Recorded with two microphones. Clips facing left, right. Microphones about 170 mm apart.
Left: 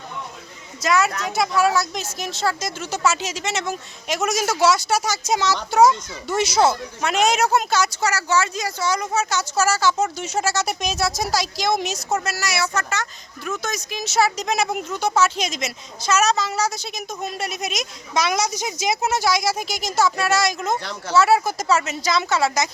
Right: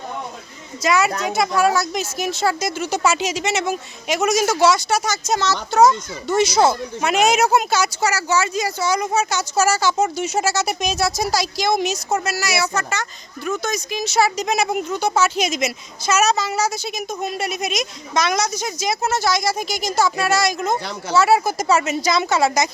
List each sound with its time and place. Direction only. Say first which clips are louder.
0.8 s speech: right 2 dB; centre (ahead or behind)
20.7 s speech: right 1 dB; 10° right (ahead or behind)